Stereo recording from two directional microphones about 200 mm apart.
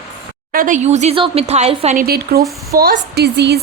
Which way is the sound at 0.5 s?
40° right (ahead or behind).